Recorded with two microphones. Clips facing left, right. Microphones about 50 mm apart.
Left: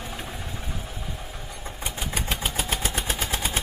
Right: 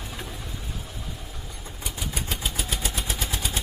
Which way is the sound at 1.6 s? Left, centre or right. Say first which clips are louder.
Left 2 dB; left.